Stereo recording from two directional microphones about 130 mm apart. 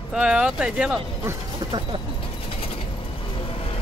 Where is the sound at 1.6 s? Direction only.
30° right (ahead or behind).